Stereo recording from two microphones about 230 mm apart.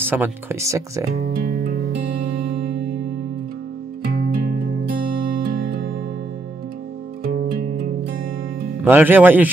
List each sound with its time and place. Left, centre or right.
0.0 s speech: centre
1.3 s music: right
4.0 s music: right
5.4 s music: right
7.2 s music: right
8.8 s speech: centre